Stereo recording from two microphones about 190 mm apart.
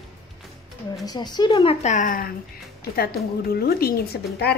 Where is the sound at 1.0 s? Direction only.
20° left (ahead or behind).